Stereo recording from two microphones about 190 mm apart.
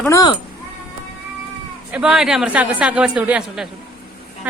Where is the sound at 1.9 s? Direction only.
5° right (ahead or behind).